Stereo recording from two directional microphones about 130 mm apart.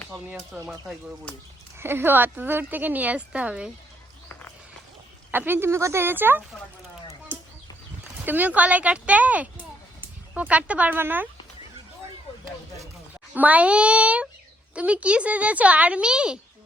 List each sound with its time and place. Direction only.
0.1 s speech: 5° right (ahead or behind)
1.8 s a woman's voice: 15° right (ahead or behind)
5.3 s a woman's voice: 15° right (ahead or behind)
8.2 s a woman's voice: 15° right (ahead or behind)
13.3 s a woman's voice: 10° right (ahead or behind)